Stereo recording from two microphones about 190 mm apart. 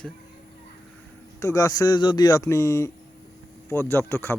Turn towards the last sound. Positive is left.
turn(degrees=10)  # may be behind; listen again after turning